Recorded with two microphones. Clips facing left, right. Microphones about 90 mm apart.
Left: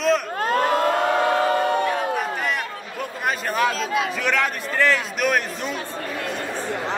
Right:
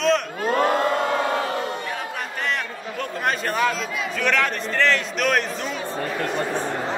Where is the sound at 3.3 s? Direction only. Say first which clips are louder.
Left 1 dB; 5° left (ahead or behind).